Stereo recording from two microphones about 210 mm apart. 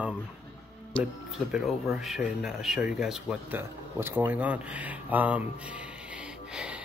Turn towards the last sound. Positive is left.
turn(degrees=-5)  # may be behind; listen again after turning